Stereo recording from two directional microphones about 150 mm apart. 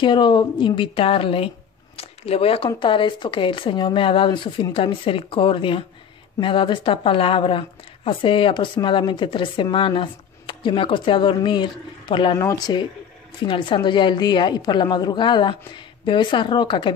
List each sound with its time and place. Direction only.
0.0 s a woman's voice: 30° left (ahead or behind)